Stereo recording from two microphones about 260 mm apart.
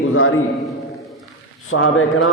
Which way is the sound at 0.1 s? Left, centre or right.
Left.